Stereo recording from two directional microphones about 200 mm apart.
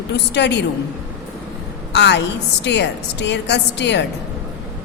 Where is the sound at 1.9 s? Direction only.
60° left (ahead or behind).